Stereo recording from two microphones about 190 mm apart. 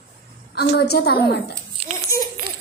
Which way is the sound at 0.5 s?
60° left (ahead or behind).